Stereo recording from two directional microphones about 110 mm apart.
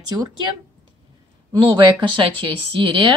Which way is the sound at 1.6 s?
50° right (ahead or behind).